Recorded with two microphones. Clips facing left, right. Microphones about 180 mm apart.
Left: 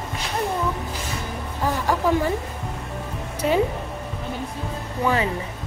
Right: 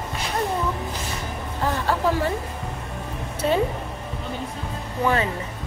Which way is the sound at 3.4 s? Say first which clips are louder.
Left 1 dB; 15° left (ahead or behind).